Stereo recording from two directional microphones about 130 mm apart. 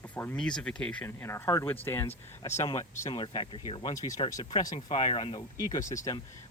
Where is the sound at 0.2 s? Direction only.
10° left (ahead or behind).